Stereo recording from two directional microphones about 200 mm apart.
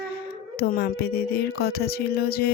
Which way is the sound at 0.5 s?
50° left (ahead or behind).